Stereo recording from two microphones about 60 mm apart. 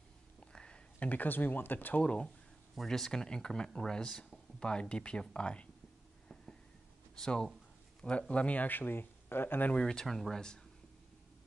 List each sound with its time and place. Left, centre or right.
0.5 s speech: centre; by 2.0 s left
2.7 s speech: centre
7.2 s speech: centre; by 9.8 s left
9.8 s speech: centre